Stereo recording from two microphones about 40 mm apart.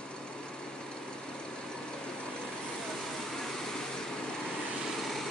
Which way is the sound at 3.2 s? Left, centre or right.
Centre.